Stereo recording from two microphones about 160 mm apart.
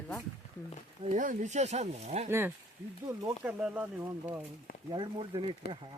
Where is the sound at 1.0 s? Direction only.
50° right (ahead or behind).